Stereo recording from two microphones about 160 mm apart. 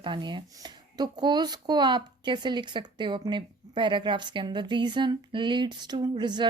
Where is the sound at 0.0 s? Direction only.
30° right (ahead or behind).